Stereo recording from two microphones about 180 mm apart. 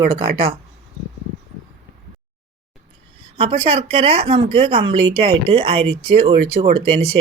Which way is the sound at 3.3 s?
35° right (ahead or behind).